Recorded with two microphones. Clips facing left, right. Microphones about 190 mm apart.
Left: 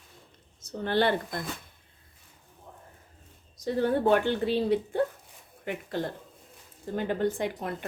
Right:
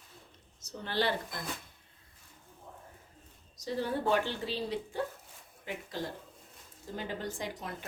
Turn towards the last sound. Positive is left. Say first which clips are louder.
# left 8 dB
turn(degrees=60)  # may be behind; listen again after turning